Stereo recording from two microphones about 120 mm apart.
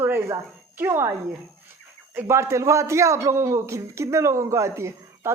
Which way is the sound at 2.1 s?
20° right (ahead or behind).